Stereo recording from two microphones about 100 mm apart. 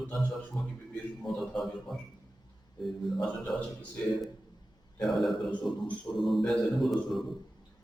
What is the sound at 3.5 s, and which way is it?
Speech, 5° left (ahead or behind).